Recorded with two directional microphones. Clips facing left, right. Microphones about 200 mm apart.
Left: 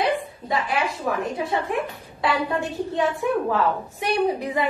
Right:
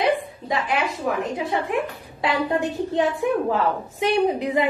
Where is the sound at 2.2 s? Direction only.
20° right (ahead or behind).